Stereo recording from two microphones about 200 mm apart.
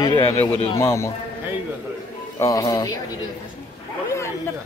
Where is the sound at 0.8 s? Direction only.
15° left (ahead or behind).